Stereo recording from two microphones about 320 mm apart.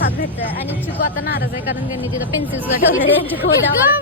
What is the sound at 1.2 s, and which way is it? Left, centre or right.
Speech, left.